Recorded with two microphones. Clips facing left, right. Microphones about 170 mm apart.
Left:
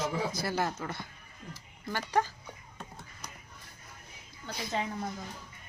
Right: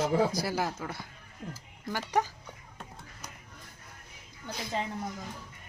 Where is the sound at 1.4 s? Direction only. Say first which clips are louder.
Right 5 dB; 75° right (ahead or behind).